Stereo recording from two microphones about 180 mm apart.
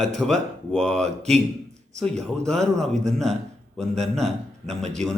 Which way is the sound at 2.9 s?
40° right (ahead or behind).